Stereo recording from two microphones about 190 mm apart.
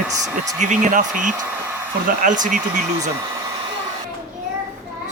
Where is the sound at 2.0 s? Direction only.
45° right (ahead or behind).